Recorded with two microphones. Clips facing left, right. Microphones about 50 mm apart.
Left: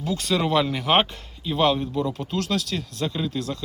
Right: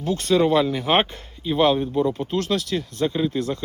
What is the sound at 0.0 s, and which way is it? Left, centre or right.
Speech, right.